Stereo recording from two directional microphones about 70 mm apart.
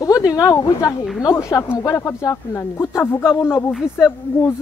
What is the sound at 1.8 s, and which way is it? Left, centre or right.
Speech, left.